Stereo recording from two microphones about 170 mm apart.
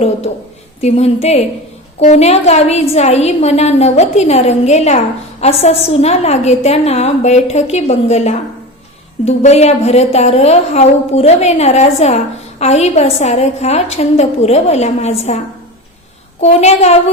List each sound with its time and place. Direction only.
0.8 s a woman's voice: 40° left (ahead or behind)
16.4 s a woman's voice: 40° left (ahead or behind)